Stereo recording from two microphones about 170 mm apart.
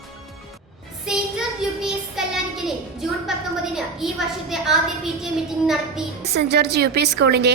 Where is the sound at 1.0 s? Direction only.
5° right (ahead or behind).